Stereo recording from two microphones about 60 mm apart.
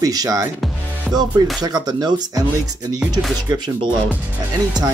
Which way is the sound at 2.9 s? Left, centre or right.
Centre.